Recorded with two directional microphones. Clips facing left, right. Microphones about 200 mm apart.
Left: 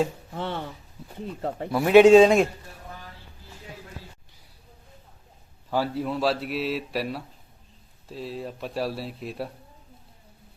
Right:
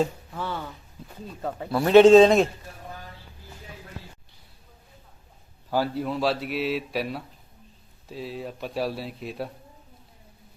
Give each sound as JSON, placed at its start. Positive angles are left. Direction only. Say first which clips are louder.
{"t": 0.3, "sound": "speech", "louder": "left 1 dB", "side_deg": 25}
{"t": 1.7, "sound": "a man's voice", "louder": "even", "side_deg": 10}
{"t": 5.7, "sound": "a man's voice", "louder": "even", "side_deg": 0}